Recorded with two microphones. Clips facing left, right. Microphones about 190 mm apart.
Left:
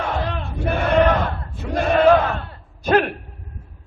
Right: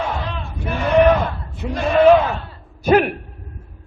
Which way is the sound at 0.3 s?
55° left (ahead or behind).